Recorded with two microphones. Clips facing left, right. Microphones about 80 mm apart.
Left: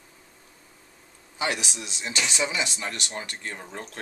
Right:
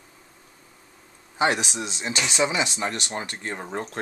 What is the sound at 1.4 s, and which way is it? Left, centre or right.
Speech, right.